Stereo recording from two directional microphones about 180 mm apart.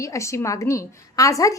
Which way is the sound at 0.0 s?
15° left (ahead or behind).